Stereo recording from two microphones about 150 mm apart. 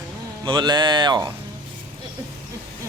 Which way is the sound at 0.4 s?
30° right (ahead or behind).